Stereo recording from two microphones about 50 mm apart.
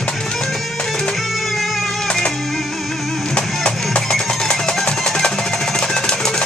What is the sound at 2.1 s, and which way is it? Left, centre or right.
Music, centre.